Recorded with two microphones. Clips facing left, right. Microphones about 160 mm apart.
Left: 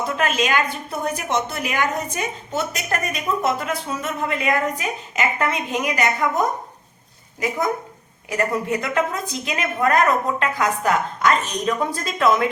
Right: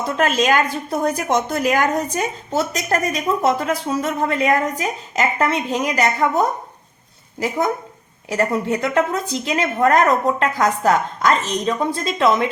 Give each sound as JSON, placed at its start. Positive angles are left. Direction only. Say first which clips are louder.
{"t": 0.2, "sound": "a woman's voice", "louder": "right 5 dB", "side_deg": -35}
{"t": 8.3, "sound": "a woman's voice", "louder": "right 3 dB", "side_deg": -30}